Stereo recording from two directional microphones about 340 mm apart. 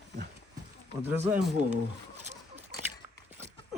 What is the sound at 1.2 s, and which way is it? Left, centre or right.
Speech, right.